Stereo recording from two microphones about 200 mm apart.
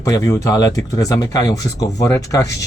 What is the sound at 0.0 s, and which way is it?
Speech, 15° left (ahead or behind).